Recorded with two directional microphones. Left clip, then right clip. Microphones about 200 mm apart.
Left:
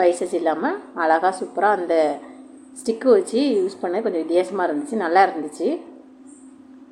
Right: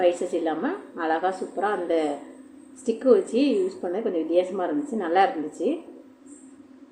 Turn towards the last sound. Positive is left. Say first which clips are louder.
# left 4 dB
turn(degrees=20)  # may be behind; listen again after turning